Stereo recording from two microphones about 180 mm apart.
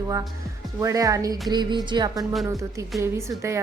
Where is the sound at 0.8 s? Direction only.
20° right (ahead or behind).